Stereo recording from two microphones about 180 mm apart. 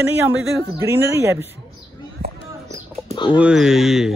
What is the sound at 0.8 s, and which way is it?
Speech, 15° right (ahead or behind).